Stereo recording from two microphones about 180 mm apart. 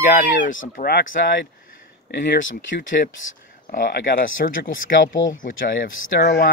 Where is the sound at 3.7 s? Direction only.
50° left (ahead or behind).